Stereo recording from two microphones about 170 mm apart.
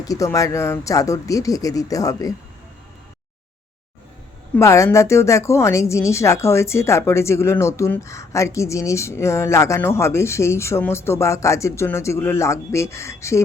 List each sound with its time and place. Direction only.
0.0 s speech: 20° left (ahead or behind)
4.5 s a woman's voice: 15° left (ahead or behind)